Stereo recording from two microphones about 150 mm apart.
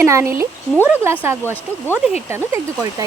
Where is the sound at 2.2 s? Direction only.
15° right (ahead or behind).